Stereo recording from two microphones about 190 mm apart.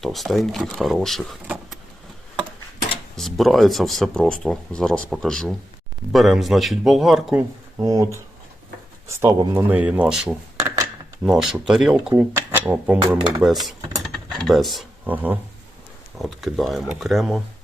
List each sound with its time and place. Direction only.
0.0 s speech: centre (ahead or behind)
3.2 s speech: centre (ahead or behind)
7.8 s speech: 20° right (ahead or behind)
10.6 s a sound: 15° right (ahead or behind)
11.3 s speech: centre (ahead or behind)